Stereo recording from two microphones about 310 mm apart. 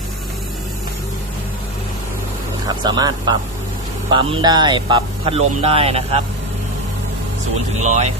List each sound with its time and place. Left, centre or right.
2.6 s speech: centre
7.8 s speech: right